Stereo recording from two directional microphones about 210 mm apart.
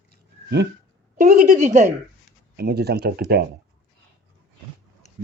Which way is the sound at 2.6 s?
50° right (ahead or behind).